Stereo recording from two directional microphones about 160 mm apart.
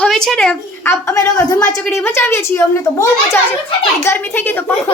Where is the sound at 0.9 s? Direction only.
20° left (ahead or behind).